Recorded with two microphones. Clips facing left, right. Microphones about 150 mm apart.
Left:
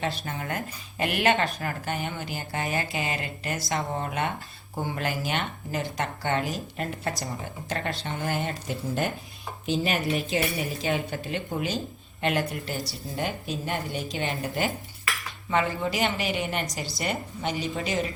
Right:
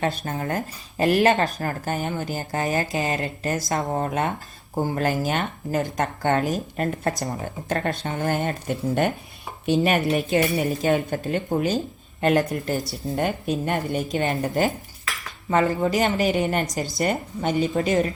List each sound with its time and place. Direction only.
0.0 s a woman's voice: 50° right (ahead or behind)